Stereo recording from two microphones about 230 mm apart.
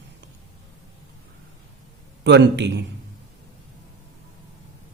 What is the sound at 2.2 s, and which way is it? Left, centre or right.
Speech, right.